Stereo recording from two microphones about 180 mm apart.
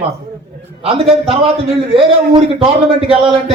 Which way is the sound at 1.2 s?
35° right (ahead or behind).